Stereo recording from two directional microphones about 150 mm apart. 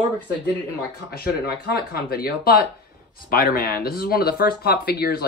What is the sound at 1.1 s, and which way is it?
Speech, 90° left.